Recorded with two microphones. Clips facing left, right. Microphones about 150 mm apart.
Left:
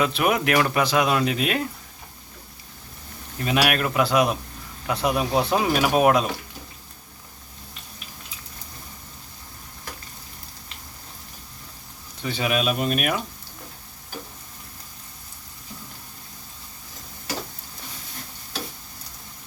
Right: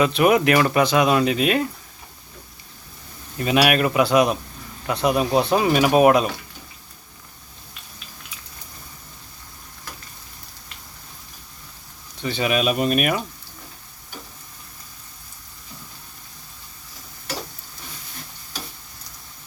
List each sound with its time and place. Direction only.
0.0 s speech: centre (ahead or behind)
3.4 s speech: 5° right (ahead or behind)
12.2 s speech: centre (ahead or behind)